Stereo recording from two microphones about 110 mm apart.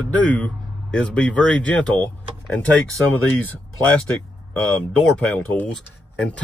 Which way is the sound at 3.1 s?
15° left (ahead or behind).